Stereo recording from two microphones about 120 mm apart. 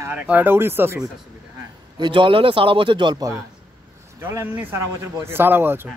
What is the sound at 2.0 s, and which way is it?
A man's voice, 40° right (ahead or behind).